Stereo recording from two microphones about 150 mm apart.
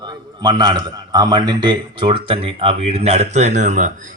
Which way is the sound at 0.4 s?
30° right (ahead or behind).